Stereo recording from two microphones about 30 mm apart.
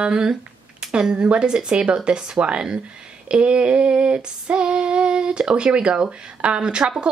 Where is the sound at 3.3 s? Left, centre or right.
Right.